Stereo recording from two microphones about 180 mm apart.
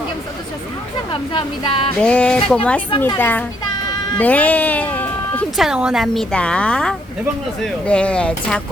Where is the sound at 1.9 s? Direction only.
5° left (ahead or behind).